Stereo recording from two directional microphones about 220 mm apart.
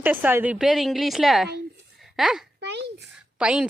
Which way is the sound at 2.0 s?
Centre (ahead or behind).